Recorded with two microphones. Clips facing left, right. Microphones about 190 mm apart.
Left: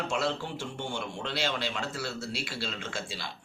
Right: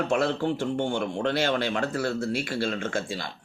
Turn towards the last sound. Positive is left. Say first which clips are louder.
# right 8 dB
turn(degrees=-50)  # may be behind; listen again after turning